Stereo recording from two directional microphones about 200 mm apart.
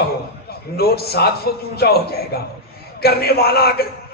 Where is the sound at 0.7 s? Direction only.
50° left (ahead or behind).